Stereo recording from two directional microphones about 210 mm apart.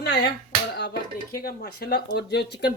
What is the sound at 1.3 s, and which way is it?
A woman's voice, 50° left (ahead or behind).